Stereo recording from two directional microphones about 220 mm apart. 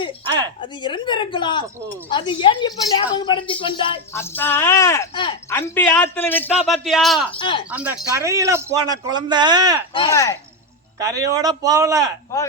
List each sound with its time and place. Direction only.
0.3 s speech: 20° right (ahead or behind)
0.6 s a woman's voice: 20° left (ahead or behind)
4.1 s a man's voice: 10° left (ahead or behind)
5.5 s a man's voice: 10° left (ahead or behind)
7.3 s a woman's voice: 25° left (ahead or behind)
7.7 s speech: 5° right (ahead or behind)
9.9 s a man's voice: 20° left (ahead or behind)
10.9 s speech: 15° right (ahead or behind)